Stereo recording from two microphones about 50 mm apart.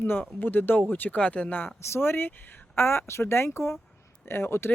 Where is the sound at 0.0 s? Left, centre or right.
Left.